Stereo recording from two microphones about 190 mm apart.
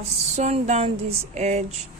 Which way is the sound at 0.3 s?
35° right (ahead or behind).